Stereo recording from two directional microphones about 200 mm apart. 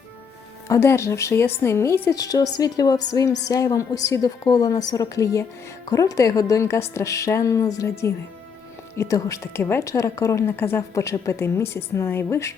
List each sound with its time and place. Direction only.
0.7 s a woman's voice: 15° left (ahead or behind)